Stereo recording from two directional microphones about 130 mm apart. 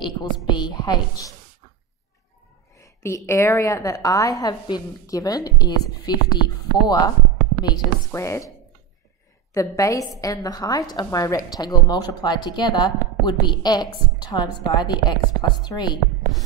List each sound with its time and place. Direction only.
0.5 s a woman's voice: 35° left (ahead or behind)
2.8 s a woman's voice: 20° left (ahead or behind)